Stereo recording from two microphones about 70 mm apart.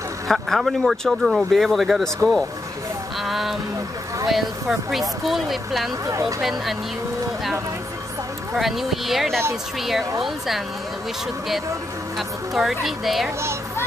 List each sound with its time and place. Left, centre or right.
0.3 s speech: centre
3.2 s a sound: centre
4.3 s speech: centre
6.0 s speech: right
6.4 s speech: centre
8.5 s speech: centre
12.2 s speech: centre